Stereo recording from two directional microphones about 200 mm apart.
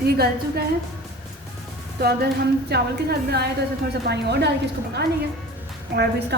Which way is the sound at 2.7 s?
55° right (ahead or behind).